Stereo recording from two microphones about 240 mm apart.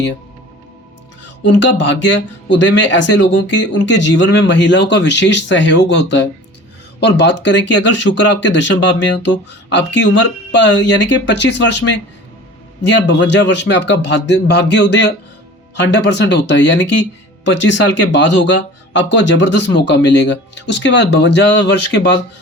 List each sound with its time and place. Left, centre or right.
1.5 s speech: left
12.9 s speech: left